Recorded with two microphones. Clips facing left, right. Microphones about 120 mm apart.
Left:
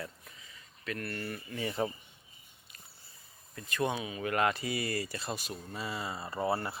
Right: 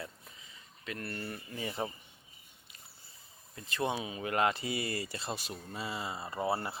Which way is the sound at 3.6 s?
25° right (ahead or behind).